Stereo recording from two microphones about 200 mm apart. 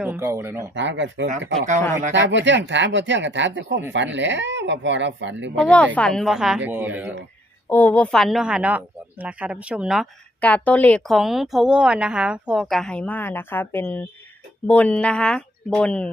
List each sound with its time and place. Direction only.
0.0 s speech: 10° right (ahead or behind)
0.7 s speech: 65° right (ahead or behind)
5.6 s speech: 5° left (ahead or behind); by 7.1 s 10° right (ahead or behind)
7.7 s speech: 10° left (ahead or behind)